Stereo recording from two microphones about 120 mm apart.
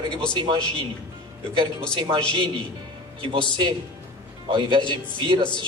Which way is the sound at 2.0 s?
45° right (ahead or behind).